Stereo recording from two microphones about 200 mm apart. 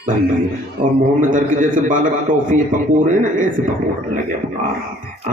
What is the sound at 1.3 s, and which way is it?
A man's voice, 40° right (ahead or behind).